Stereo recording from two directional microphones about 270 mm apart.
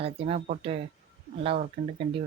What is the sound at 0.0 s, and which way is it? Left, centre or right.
Speech, right.